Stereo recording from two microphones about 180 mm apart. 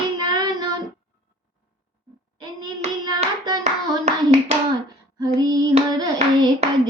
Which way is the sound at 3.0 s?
20° right (ahead or behind).